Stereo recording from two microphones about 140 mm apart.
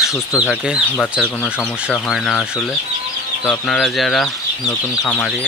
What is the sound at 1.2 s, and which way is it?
Speech, 10° left (ahead or behind).